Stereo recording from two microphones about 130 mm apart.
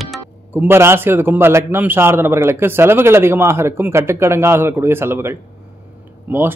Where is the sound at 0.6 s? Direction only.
20° right (ahead or behind).